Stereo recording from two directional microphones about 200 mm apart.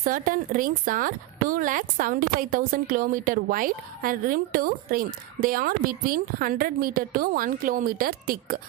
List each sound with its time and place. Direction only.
0.0 s speech: 45° right (ahead or behind)